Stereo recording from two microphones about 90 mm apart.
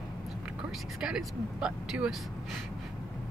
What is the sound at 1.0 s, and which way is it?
Speech, 10° right (ahead or behind).